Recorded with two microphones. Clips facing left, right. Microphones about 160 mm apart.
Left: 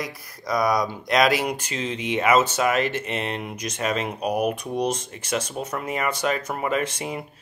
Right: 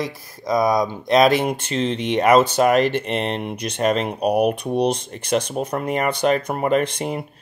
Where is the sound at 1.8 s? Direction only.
10° left (ahead or behind).